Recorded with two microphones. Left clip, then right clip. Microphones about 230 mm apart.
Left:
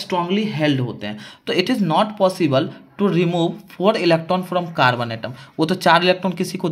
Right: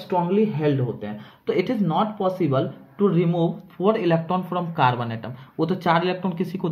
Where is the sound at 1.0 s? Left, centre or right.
Left.